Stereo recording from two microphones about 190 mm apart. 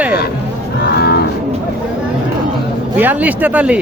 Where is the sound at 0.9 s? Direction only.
55° left (ahead or behind).